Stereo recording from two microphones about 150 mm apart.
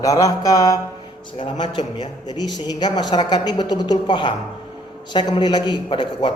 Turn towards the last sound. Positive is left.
turn(degrees=30)  # may be behind; listen again after turning